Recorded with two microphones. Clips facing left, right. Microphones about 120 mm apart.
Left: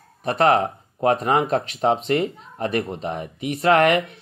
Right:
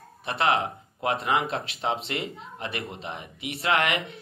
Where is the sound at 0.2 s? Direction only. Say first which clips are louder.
Left 7 dB; 40° left (ahead or behind).